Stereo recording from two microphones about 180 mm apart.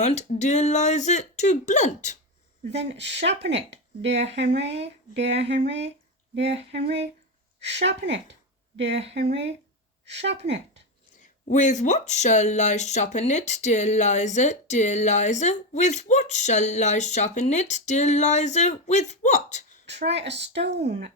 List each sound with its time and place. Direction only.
0.0 s speech: 40° left (ahead or behind)
3.0 s a woman's voice: 75° right (ahead or behind)
4.7 s speech: 35° right (ahead or behind)
6.3 s a woman's voice: 75° right (ahead or behind)
10.1 s a woman's voice: 75° right (ahead or behind)
11.2 s speech: 45° left (ahead or behind)
19.9 s a woman's voice: 75° right (ahead or behind)